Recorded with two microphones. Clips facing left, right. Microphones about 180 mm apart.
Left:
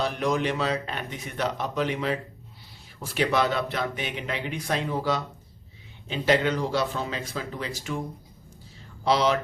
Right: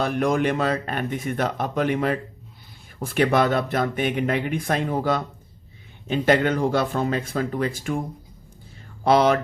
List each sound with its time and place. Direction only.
0.0 s speech: 50° right (ahead or behind)
9.0 s speech: 55° right (ahead or behind)